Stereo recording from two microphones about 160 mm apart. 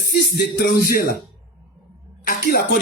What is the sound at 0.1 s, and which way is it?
Music, 80° left.